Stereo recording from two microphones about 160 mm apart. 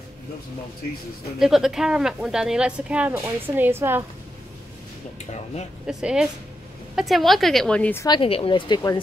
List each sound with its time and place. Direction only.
1.4 s speech: centre (ahead or behind)
5.3 s speech: 45° left (ahead or behind)
5.9 s speech: 5° right (ahead or behind)
8.0 s speech: 30° left (ahead or behind)